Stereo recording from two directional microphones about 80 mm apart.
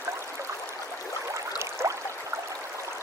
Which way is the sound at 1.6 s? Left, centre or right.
Right.